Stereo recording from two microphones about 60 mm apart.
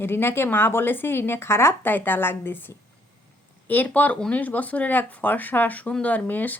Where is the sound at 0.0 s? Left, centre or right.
Left.